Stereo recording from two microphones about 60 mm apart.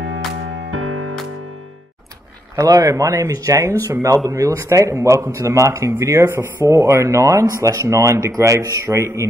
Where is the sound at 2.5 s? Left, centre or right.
Right.